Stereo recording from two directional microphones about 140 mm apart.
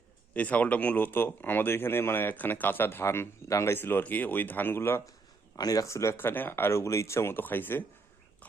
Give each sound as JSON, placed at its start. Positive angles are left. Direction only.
{"t": 0.3, "sound": "speech", "side_deg": 10}